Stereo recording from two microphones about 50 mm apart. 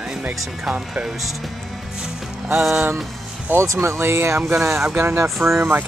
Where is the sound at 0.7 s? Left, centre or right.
Centre.